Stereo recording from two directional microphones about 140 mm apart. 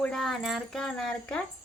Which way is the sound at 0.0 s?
5° left (ahead or behind).